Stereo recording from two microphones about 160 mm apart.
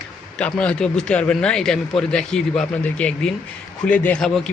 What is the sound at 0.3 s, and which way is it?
A man's voice, 5° left (ahead or behind).